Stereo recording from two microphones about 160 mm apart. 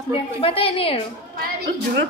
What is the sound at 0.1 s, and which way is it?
Speech, 35° left (ahead or behind).